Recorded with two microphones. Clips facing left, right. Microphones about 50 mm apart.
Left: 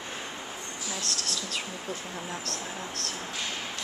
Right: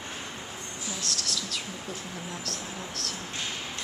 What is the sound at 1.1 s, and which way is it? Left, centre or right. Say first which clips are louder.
Speech: even; left.